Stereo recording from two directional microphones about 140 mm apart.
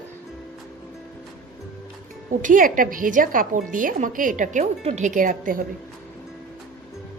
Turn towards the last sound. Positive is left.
turn(degrees=-80)